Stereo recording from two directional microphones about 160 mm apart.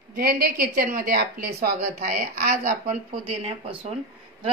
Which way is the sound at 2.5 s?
40° right (ahead or behind).